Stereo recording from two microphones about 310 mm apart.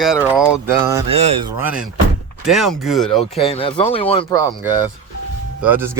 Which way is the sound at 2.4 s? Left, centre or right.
Centre.